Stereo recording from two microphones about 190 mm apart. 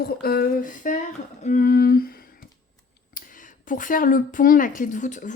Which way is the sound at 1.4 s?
45° left (ahead or behind).